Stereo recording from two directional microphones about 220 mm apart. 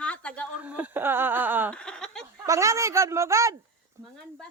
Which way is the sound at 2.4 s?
15° right (ahead or behind).